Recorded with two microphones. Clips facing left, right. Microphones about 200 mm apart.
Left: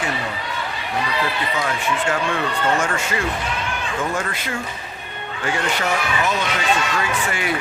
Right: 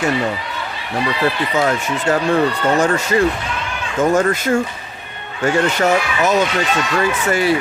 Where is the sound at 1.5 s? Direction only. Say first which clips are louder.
Right 5 dB; 40° right (ahead or behind).